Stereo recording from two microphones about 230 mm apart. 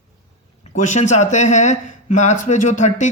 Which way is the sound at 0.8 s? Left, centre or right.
Left.